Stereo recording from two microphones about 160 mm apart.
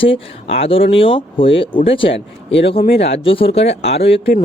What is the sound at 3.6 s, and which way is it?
Speech, 90° left.